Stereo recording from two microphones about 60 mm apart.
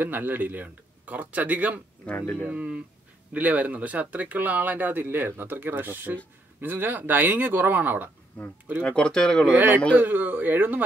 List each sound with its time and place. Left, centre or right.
0.0 s speech: right
2.1 s speech: left
2.5 s speech: right
8.8 s speech: centre
9.5 s speech: right